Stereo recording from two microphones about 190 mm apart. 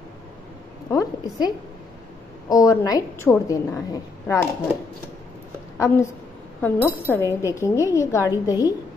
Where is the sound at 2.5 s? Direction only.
15° left (ahead or behind).